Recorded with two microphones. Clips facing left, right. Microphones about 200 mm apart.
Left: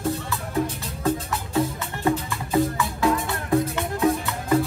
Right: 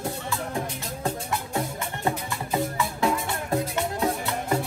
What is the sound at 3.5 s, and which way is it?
Music, 25° right (ahead or behind).